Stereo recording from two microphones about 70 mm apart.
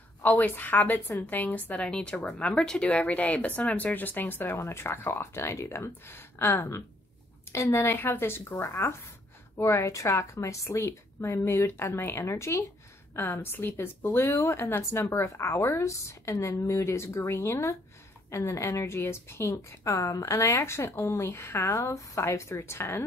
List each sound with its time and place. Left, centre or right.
0.2 s a woman's voice: left
20.0 s speech: left